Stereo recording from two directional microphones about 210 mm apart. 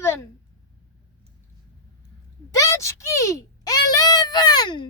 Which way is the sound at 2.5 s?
15° left (ahead or behind).